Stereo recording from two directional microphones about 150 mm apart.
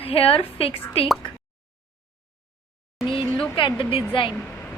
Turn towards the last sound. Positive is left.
turn(degrees=35)  # may be behind; listen again after turning